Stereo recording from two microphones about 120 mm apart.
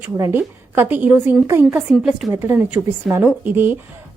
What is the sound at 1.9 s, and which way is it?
Speech, 5° right (ahead or behind).